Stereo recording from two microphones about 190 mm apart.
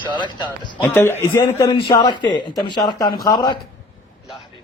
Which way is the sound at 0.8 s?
10° left (ahead or behind).